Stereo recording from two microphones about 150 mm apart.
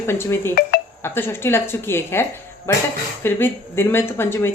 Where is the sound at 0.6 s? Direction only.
90° left.